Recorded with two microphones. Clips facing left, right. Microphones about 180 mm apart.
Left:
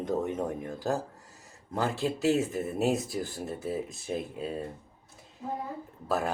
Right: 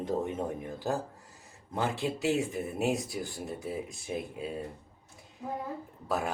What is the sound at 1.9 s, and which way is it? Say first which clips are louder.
Speech: left 4 dB; centre (ahead or behind).